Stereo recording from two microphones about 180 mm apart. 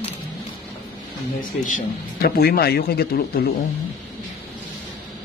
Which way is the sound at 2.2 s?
60° left (ahead or behind).